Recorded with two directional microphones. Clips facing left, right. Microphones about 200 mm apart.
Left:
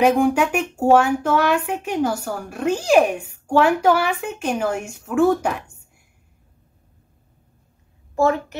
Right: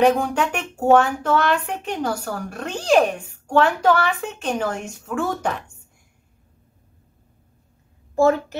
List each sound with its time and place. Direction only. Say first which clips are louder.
0.0 s speech: left 2 dB; 10° left (ahead or behind)
8.2 s a child's voice: right 2 dB; 35° right (ahead or behind)